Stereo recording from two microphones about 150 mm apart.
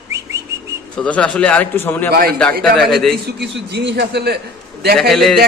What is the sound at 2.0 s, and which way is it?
Speech, 85° right.